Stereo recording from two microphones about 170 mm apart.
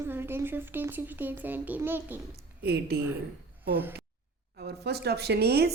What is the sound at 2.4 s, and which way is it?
Speech, 70° right (ahead or behind).